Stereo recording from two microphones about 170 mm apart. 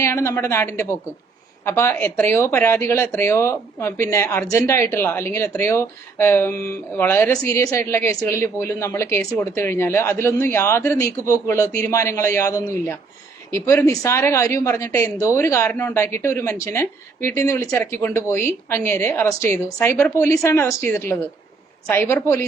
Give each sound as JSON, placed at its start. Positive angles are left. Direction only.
{"t": 0.0, "sound": "speech", "side_deg": 15}